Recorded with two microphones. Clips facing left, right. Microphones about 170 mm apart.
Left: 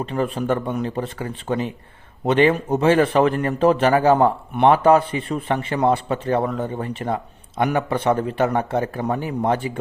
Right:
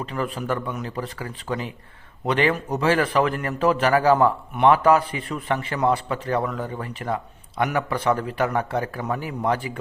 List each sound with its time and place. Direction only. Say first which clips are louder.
0.0 s a man's voice: left 5 dB; 25° left (ahead or behind)